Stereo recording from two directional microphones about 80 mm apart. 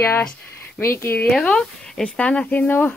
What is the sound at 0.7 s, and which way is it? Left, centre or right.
Speech, left.